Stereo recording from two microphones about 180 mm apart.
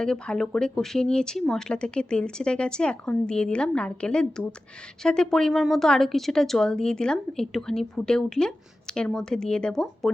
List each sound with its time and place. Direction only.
0.0 s speech: 5° left (ahead or behind)